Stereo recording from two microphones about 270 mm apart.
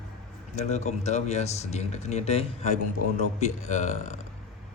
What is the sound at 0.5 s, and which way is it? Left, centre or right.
Speech, left.